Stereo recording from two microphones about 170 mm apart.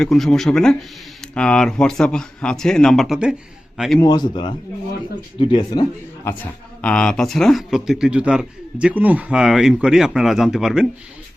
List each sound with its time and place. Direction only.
0.0 s speech: centre (ahead or behind)
4.0 s a man's voice: 25° left (ahead or behind)
6.4 s speech: 5° left (ahead or behind)